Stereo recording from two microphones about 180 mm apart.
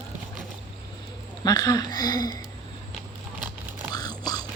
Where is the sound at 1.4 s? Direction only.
20° left (ahead or behind).